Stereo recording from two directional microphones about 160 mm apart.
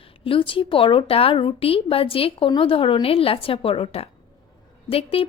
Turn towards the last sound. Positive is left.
turn(degrees=35)  # may be behind; listen again after turning